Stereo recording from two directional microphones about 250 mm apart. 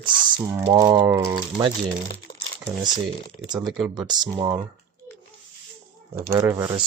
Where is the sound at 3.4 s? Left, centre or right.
Centre.